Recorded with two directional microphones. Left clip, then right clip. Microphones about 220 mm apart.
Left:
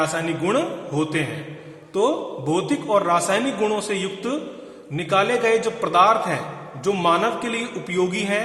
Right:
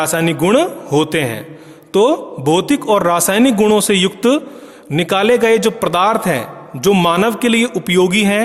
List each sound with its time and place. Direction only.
0.0 s a man's voice: 50° right (ahead or behind)